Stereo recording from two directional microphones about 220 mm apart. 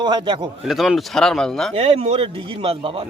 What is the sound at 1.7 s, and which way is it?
A man's voice, 25° right (ahead or behind).